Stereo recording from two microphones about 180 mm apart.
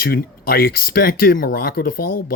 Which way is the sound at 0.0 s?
55° left (ahead or behind).